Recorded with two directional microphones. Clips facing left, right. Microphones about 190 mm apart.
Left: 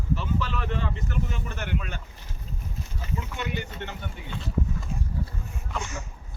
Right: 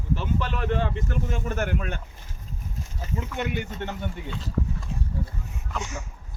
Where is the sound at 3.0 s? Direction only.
50° right (ahead or behind).